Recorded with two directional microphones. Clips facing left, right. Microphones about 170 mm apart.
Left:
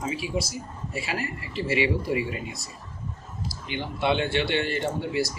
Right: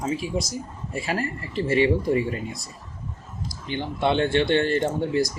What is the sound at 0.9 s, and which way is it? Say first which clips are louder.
Speech: right 4 dB; 45° right (ahead or behind).